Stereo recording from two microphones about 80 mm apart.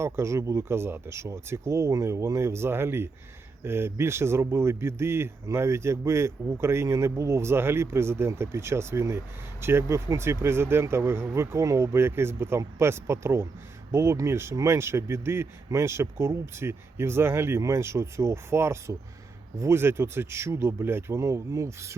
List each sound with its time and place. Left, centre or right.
0.0 s speech: right